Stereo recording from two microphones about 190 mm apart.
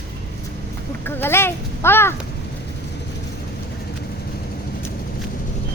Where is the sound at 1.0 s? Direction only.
10° left (ahead or behind).